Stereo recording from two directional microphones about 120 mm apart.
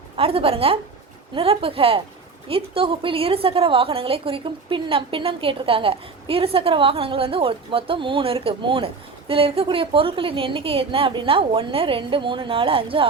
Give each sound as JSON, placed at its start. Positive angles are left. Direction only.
{"t": 0.2, "sound": "a woman's voice", "side_deg": -50}